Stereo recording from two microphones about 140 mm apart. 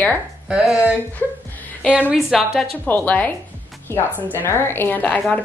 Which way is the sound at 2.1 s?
Centre (ahead or behind).